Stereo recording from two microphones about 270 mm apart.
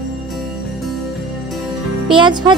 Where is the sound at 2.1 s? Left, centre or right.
Centre.